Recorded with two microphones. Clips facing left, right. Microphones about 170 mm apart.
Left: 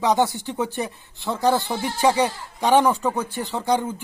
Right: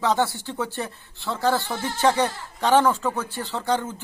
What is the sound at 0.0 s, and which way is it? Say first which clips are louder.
Speech: left 3 dB; 15° left (ahead or behind).